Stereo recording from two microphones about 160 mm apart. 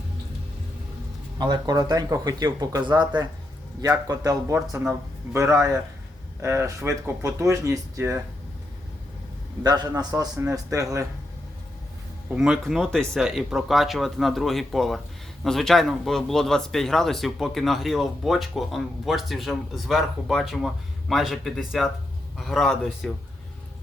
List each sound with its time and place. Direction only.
1.4 s a man's voice: 25° right (ahead or behind)
9.6 s speech: 25° right (ahead or behind)
12.3 s speech: 5° right (ahead or behind)